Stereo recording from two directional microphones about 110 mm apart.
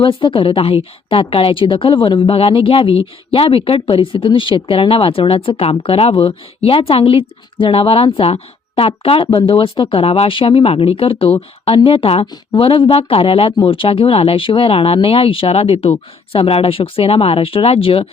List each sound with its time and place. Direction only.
0.0 s speech: 55° left (ahead or behind)